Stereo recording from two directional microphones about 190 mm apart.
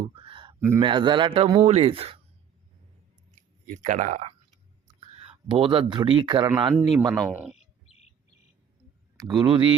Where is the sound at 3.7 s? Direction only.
40° right (ahead or behind).